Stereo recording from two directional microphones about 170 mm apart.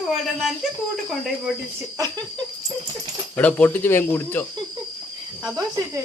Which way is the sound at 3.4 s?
10° left (ahead or behind).